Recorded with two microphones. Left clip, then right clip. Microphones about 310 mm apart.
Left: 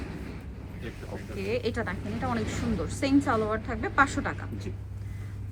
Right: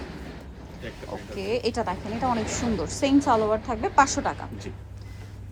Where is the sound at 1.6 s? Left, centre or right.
Centre.